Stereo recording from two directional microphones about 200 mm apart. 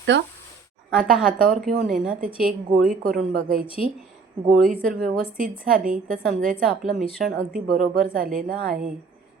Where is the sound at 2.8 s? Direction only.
45° right (ahead or behind).